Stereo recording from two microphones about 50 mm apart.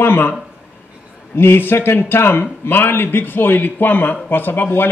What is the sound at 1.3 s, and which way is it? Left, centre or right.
A man's voice, left.